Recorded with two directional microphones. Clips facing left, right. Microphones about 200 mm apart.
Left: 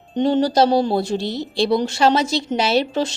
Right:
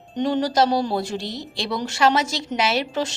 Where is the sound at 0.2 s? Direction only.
25° left (ahead or behind).